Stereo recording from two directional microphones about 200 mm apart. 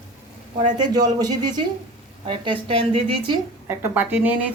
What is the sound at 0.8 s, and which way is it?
A woman's voice, 20° right (ahead or behind).